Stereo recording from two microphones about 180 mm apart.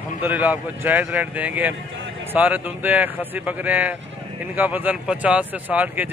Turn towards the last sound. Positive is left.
turn(degrees=-10)  # may be behind; listen again after turning